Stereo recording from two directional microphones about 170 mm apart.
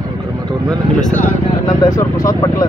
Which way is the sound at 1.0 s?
50° left (ahead or behind).